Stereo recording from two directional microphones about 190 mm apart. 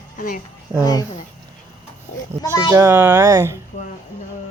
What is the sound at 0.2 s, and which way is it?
Speech, 45° left (ahead or behind).